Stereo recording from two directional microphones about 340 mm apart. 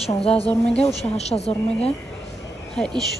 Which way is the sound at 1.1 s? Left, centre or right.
Centre.